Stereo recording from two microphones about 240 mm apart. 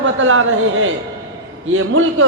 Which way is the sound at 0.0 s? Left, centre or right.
Right.